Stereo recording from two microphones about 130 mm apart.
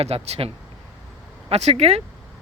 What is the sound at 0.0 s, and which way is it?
A man's voice, 50° right (ahead or behind).